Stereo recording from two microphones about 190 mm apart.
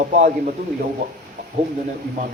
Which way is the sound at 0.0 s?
45° right (ahead or behind).